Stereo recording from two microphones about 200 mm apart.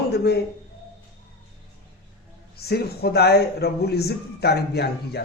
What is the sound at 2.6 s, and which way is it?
Speech, 50° left (ahead or behind).